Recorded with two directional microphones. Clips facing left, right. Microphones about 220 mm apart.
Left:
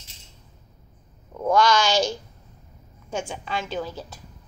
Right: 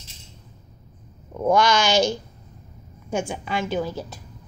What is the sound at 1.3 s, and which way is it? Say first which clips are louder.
Speech: right 1 dB; 15° right (ahead or behind).